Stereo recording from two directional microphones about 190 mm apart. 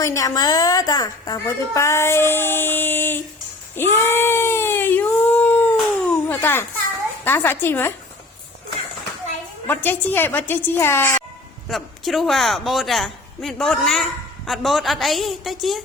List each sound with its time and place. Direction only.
0.0 s a woman's voice: 15° left (ahead or behind)
3.8 s a sound: 10° left (ahead or behind)
7.3 s a woman's voice: 10° left (ahead or behind)
9.6 s a woman's voice: 10° left (ahead or behind)
11.7 s a man's voice: centre (ahead or behind)